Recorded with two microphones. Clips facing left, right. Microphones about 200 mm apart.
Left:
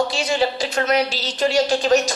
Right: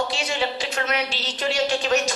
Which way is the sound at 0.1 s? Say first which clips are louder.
Left 5 dB; 40° left (ahead or behind).